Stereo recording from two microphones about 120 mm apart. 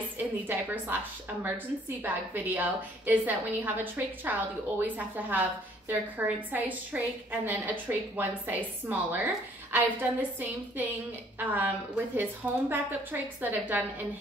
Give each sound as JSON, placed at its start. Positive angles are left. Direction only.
{"t": 0.2, "sound": "a woman's voice", "side_deg": -15}
{"t": 2.0, "sound": "a woman's voice", "side_deg": -15}
{"t": 11.3, "sound": "a woman's voice", "side_deg": -15}